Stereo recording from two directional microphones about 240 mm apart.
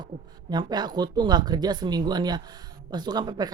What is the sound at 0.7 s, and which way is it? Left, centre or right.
Speech, centre.